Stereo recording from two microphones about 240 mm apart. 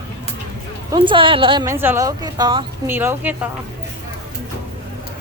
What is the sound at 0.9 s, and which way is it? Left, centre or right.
Speech, right.